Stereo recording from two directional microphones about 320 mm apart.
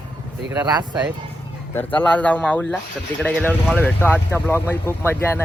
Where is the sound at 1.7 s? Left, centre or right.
Centre.